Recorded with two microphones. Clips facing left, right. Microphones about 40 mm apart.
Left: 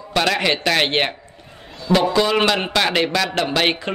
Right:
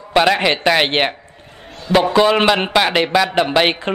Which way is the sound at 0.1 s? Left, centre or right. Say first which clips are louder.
Right 5 dB; centre.